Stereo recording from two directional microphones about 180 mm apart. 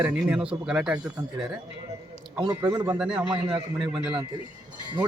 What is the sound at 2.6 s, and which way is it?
Speech, 20° right (ahead or behind).